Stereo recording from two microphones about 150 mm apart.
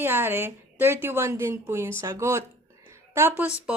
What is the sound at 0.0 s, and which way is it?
Speech, 15° right (ahead or behind).